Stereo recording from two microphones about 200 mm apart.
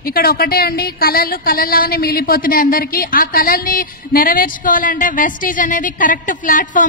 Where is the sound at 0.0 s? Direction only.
50° left (ahead or behind).